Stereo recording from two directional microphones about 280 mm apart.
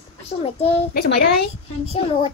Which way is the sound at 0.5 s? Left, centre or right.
Left.